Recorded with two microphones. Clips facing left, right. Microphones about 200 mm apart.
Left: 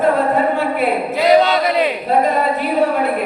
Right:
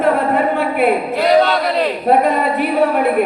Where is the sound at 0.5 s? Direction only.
55° right (ahead or behind).